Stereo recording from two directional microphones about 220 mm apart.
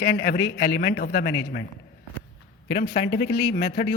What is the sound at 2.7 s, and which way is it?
Speech, 45° left (ahead or behind).